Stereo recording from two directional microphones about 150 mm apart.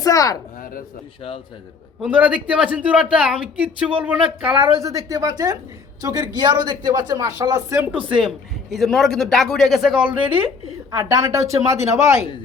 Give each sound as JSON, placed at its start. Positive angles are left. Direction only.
{"t": 0.0, "sound": "speech", "side_deg": 25}
{"t": 0.6, "sound": "a sound", "side_deg": 70}
{"t": 2.0, "sound": "a man's voice", "side_deg": -10}
{"t": 4.8, "sound": "speech", "side_deg": -20}
{"t": 8.0, "sound": "a man's voice", "side_deg": -5}
{"t": 10.1, "sound": "a man's voice", "side_deg": -10}
{"t": 10.9, "sound": "speech", "side_deg": -20}